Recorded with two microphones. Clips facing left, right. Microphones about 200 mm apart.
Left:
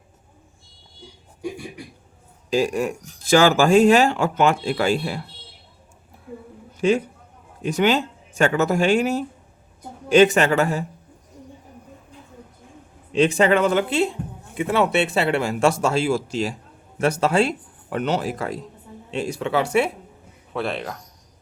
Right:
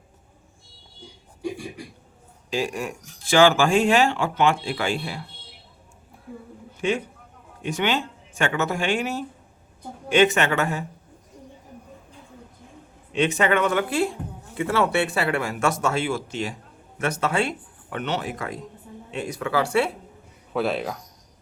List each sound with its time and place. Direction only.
2.5 s speech: 40° left (ahead or behind)
6.8 s speech: 35° left (ahead or behind)
13.1 s speech: 30° left (ahead or behind)
20.5 s speech: 5° right (ahead or behind)